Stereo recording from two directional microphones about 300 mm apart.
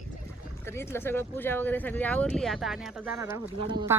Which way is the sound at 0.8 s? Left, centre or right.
Centre.